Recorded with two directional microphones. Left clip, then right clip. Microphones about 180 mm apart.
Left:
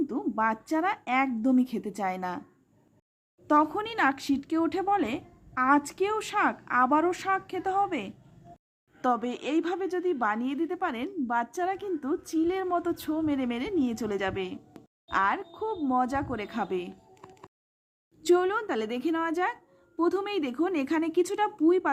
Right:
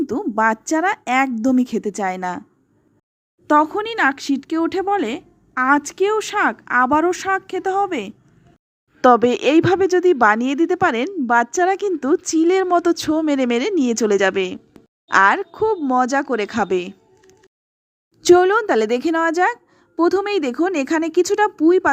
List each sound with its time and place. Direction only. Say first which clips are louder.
0.0 s speech: right 10 dB; 40° right (ahead or behind)
3.4 s speech: right 8 dB; 35° right (ahead or behind)
18.2 s speech: right 12 dB; 40° right (ahead or behind)